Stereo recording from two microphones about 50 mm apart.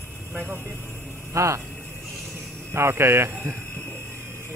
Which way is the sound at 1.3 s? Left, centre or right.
Right.